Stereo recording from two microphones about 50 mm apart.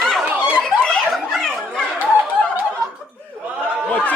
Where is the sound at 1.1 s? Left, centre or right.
Centre.